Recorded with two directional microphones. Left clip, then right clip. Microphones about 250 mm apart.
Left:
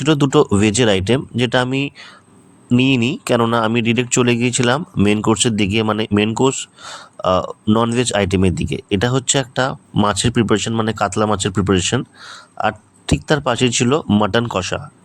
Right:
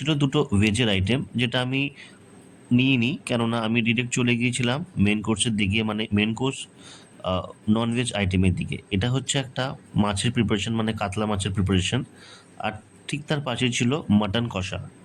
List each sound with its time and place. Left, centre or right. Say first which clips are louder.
0.0 s speech: left 10 dB; left